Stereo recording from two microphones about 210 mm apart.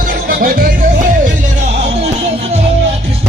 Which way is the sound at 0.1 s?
45° right (ahead or behind).